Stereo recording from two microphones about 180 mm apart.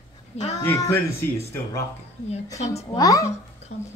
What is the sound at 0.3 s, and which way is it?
Speech, 35° left (ahead or behind).